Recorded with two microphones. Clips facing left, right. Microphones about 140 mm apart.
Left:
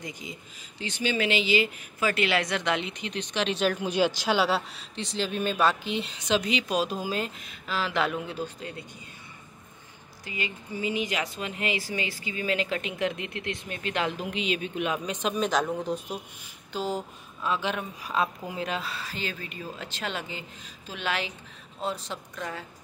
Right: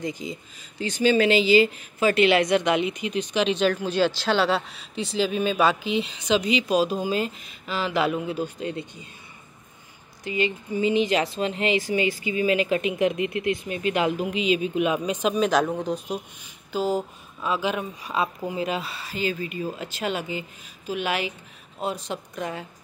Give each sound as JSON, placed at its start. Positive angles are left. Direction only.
{"t": 0.0, "sound": "speech", "side_deg": -30}
{"t": 2.0, "sound": "speech", "side_deg": -25}
{"t": 3.8, "sound": "speech", "side_deg": 15}
{"t": 10.2, "sound": "speech", "side_deg": -25}